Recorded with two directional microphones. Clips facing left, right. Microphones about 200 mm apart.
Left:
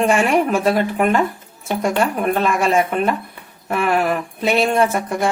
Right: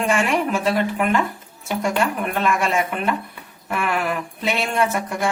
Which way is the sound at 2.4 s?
35° left (ahead or behind).